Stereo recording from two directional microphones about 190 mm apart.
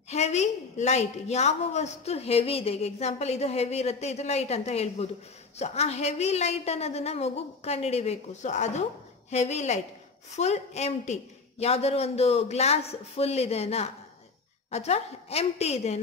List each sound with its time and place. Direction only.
0.1 s a woman's voice: 35° left (ahead or behind)